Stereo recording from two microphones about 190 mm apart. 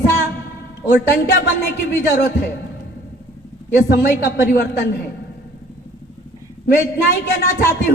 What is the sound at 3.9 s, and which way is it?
Speech, 55° left (ahead or behind).